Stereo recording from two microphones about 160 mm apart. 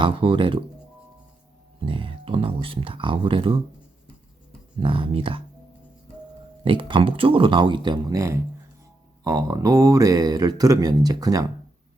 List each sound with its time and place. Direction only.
0.0 s speech: 30° right (ahead or behind)
1.8 s speech: 35° right (ahead or behind)
4.8 s speech: 35° right (ahead or behind)
6.7 s speech: 30° right (ahead or behind)